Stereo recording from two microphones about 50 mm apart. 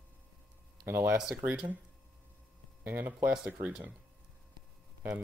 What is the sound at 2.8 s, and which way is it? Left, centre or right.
Speech, right.